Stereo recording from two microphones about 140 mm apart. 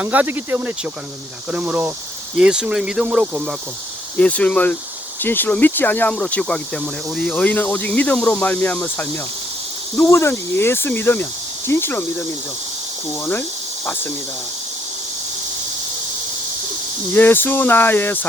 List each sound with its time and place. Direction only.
0.0 s speech: 10° right (ahead or behind)
4.2 s speech: 10° left (ahead or behind)
17.2 s speech: 15° left (ahead or behind)